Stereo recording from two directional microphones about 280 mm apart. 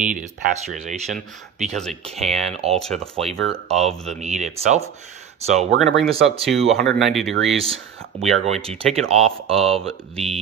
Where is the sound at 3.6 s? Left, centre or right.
Right.